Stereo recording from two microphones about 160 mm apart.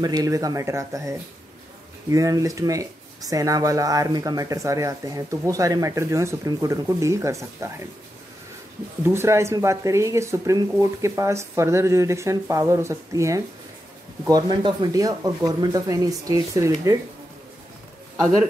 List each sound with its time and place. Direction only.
0.0 s speech: 25° right (ahead or behind)
9.0 s speech: 15° right (ahead or behind)
14.5 s speech: 30° right (ahead or behind)